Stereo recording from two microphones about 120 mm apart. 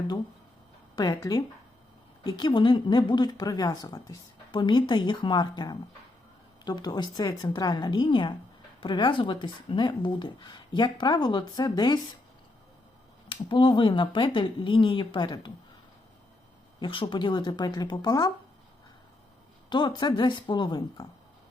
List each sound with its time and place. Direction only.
0.9 s a woman's voice: 35° left (ahead or behind)
13.2 s a woman's voice: 45° left (ahead or behind)
16.8 s a woman's voice: 45° left (ahead or behind)
19.7 s a woman's voice: 40° left (ahead or behind)